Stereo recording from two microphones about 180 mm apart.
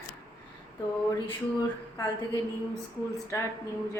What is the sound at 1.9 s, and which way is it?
A woman's voice, 20° left (ahead or behind).